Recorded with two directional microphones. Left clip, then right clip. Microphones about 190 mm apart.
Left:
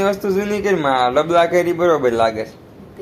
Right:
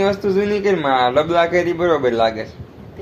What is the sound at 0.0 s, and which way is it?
A man's voice, 15° left (ahead or behind).